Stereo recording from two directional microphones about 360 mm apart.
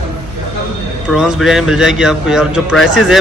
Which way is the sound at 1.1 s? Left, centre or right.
Centre.